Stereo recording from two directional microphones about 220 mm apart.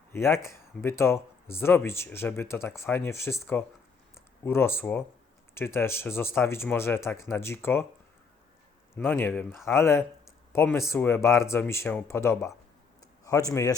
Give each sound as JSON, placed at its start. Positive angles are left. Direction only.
{"t": 0.1, "sound": "speech", "side_deg": 10}
{"t": 9.0, "sound": "speech", "side_deg": 10}